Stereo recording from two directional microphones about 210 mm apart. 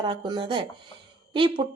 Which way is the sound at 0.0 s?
25° right (ahead or behind).